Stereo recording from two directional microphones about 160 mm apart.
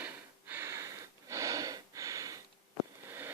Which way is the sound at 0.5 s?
20° right (ahead or behind).